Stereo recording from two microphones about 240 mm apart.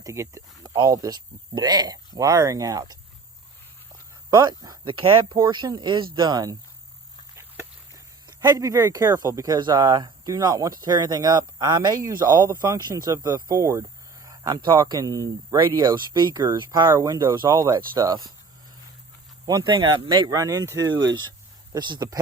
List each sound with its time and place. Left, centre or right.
0.0 s speech: centre
4.3 s speech: centre
7.3 s a sound: centre
8.3 s speech: centre
19.5 s speech: centre
21.0 s speech: right
21.7 s speech: centre